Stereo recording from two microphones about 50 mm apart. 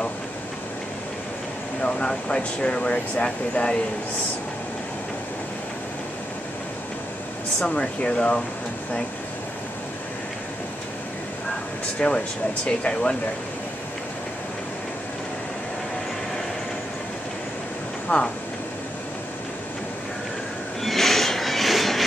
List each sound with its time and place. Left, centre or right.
1.8 s speech: centre
7.6 s speech: centre
12.0 s speech: centre
18.0 s speech: centre
20.8 s train: centre